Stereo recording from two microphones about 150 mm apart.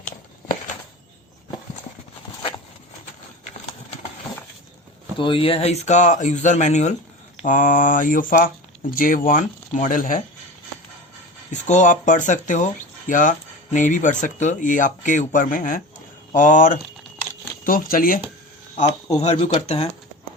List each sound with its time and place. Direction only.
5.1 s speech: 35° left (ahead or behind); by 10.2 s 65° left (ahead or behind)
11.5 s speech: 55° left (ahead or behind); by 18.2 s 70° left (ahead or behind)
19.2 s speech: 45° left (ahead or behind)